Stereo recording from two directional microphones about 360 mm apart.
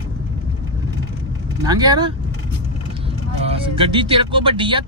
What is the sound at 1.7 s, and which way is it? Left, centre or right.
Speech, centre.